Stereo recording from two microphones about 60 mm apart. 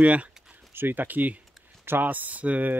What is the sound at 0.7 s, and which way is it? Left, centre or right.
Speech, right.